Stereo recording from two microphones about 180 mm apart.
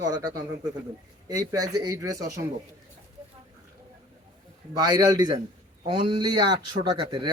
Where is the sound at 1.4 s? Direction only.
20° right (ahead or behind).